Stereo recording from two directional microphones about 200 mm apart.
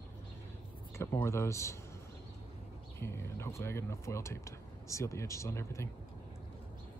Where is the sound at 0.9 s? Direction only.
15° left (ahead or behind).